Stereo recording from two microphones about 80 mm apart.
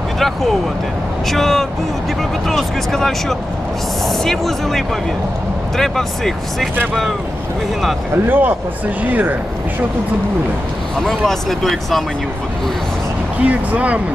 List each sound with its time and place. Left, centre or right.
0.2 s speech: centre
8.1 s speech: right
11.0 s speech: centre
13.4 s speech: centre